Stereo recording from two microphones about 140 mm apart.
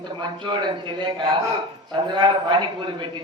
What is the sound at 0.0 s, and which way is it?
A woman's voice, 35° right (ahead or behind).